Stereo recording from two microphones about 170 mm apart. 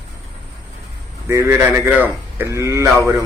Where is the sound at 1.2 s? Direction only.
15° right (ahead or behind).